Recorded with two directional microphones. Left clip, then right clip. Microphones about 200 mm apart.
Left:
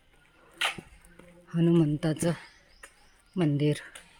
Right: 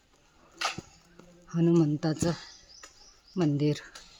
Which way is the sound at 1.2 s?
10° left (ahead or behind).